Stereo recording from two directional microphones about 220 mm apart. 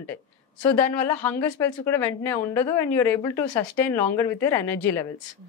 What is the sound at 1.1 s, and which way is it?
A woman's voice, 10° left (ahead or behind).